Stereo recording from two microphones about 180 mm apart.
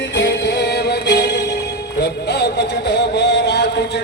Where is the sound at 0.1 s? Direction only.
75° left (ahead or behind).